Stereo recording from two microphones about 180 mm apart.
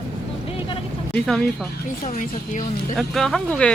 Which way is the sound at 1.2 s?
Centre (ahead or behind).